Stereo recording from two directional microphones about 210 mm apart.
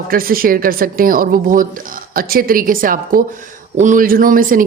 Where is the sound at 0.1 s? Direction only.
45° right (ahead or behind).